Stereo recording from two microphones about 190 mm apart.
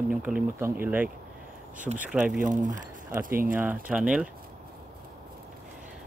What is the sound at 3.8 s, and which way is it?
Speech, 5° right (ahead or behind).